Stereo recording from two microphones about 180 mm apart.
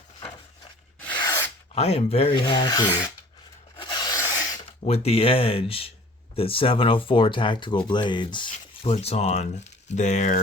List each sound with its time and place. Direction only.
1.7 s speech: 35° left (ahead or behind)
3.8 s rub: 25° left (ahead or behind)
4.9 s speech: 35° left (ahead or behind)